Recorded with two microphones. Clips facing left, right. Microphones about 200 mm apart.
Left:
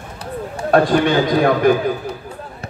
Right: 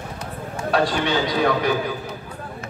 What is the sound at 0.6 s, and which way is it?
A man's voice, 50° left (ahead or behind).